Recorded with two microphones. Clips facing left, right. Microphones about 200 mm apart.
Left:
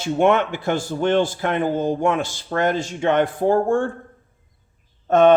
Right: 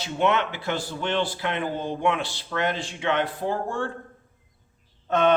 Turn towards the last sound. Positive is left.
turn(degrees=45)  # may be behind; listen again after turning